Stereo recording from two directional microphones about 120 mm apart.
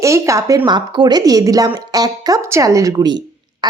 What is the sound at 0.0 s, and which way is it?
A woman's voice, 25° right (ahead or behind).